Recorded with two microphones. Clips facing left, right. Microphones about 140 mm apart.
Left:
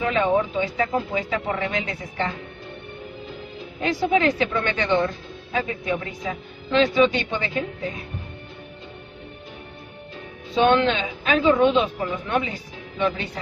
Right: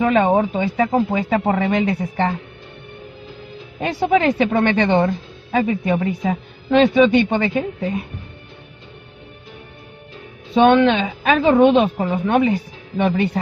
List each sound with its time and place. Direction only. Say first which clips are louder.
0.0 s a woman's voice: right 5 dB; 60° right (ahead or behind)
3.8 s a woman's voice: right 4 dB; 55° right (ahead or behind)
10.5 s a woman's voice: right 6 dB; 55° right (ahead or behind)